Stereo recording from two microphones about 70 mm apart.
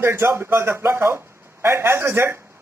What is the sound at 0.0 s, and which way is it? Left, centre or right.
A man's voice, right.